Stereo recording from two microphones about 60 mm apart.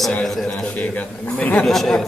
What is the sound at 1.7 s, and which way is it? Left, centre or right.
Speech, centre.